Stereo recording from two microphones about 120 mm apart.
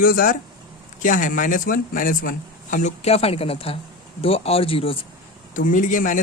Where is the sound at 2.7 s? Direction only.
70° left (ahead or behind); by 4.9 s 50° left (ahead or behind).